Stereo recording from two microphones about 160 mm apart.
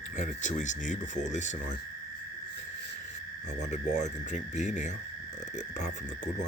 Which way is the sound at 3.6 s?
50° left (ahead or behind).